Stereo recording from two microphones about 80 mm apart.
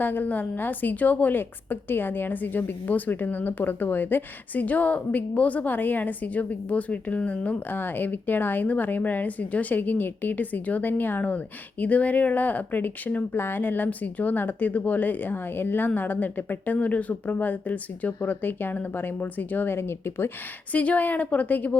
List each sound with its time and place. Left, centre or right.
0.0 s a woman's voice: left
20.7 s a woman's voice: centre